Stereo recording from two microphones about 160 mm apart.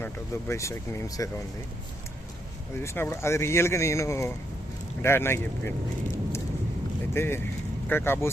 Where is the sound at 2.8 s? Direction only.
15° left (ahead or behind).